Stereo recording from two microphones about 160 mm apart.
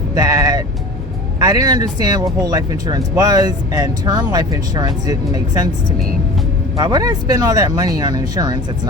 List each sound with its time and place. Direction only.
0.1 s speech: 20° right (ahead or behind)
6.7 s speech: 25° right (ahead or behind)